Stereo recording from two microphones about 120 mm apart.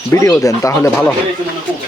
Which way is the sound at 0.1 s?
20° left (ahead or behind).